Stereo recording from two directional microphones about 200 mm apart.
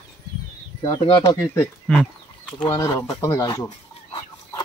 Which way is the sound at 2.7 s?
15° left (ahead or behind).